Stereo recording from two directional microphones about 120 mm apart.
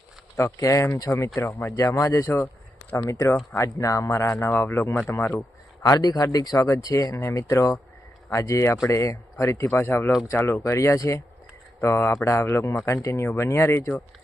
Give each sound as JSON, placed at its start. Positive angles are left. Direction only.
{"t": 0.3, "sound": "speech", "side_deg": 25}
{"t": 5.8, "sound": "speech", "side_deg": 30}